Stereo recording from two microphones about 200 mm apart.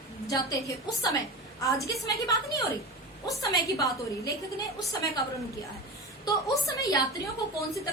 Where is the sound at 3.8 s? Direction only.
15° left (ahead or behind).